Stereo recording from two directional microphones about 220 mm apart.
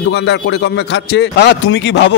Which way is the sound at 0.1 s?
50° left (ahead or behind).